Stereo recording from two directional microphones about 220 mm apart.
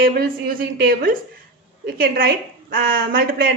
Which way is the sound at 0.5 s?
40° right (ahead or behind).